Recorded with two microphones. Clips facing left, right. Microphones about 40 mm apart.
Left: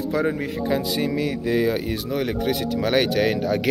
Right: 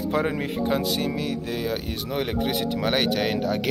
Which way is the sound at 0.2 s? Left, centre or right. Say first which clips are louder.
Left 2 dB; right.